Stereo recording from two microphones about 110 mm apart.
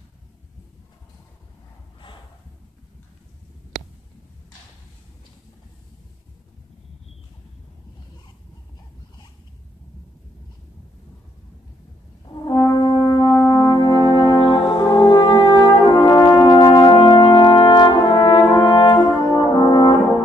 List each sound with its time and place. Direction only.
12.4 s french horn: 40° left (ahead or behind)
13.5 s music: 40° left (ahead or behind)
14.4 s brass instrument: 55° left (ahead or behind); by 16.9 s 35° left (ahead or behind)
16.9 s brass instrument: 45° left (ahead or behind)